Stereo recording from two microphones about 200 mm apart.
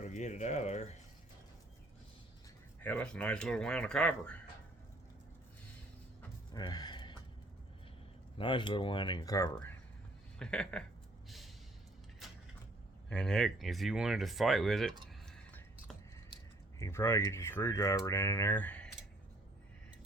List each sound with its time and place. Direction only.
0.0 s speech: 35° left (ahead or behind)
2.8 s speech: 5° left (ahead or behind)
6.5 s gasp: 20° left (ahead or behind)
8.4 s speech: 25° left (ahead or behind)
10.3 s speech: 5° left (ahead or behind)
11.3 s a sound: centre (ahead or behind)
13.1 s speech: 5° left (ahead or behind)
15.3 s a sound: 5° left (ahead or behind)
16.7 s speech: 15° left (ahead or behind)